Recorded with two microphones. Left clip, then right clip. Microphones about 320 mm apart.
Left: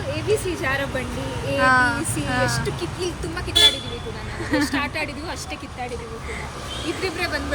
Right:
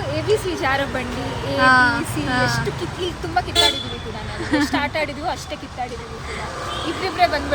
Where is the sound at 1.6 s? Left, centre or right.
Centre.